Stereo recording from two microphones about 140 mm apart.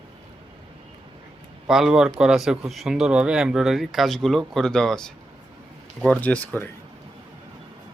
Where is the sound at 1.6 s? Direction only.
5° right (ahead or behind); by 6.7 s 10° left (ahead or behind).